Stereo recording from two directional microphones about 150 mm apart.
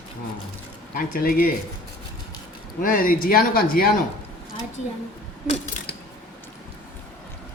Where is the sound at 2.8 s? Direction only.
70° left (ahead or behind).